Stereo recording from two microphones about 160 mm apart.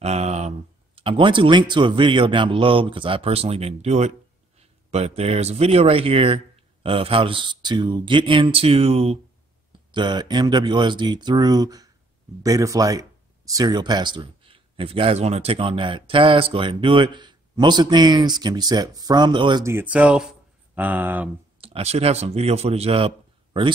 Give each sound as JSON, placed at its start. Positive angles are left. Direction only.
{"t": 0.0, "sound": "speech", "side_deg": -40}
{"t": 19.6, "sound": "speech", "side_deg": -15}
{"t": 21.5, "sound": "a man's voice", "side_deg": -35}